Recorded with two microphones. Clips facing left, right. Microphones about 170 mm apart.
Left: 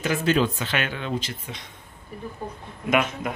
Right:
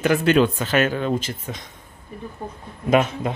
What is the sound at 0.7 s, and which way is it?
Speech, 40° right (ahead or behind).